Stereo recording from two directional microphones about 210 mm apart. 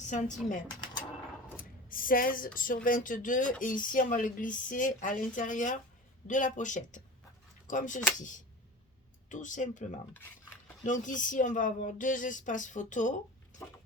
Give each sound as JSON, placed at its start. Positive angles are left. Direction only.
{"t": 0.0, "sound": "speech", "side_deg": 35}
{"t": 1.9, "sound": "speech", "side_deg": 40}
{"t": 9.3, "sound": "speech", "side_deg": 35}
{"t": 10.8, "sound": "speech", "side_deg": 40}